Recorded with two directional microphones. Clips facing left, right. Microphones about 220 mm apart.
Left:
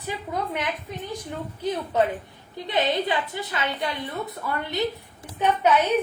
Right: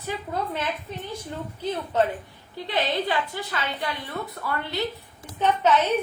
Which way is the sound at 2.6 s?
20° left (ahead or behind).